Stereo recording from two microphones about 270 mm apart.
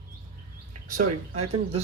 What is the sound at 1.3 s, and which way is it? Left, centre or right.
Speech, right.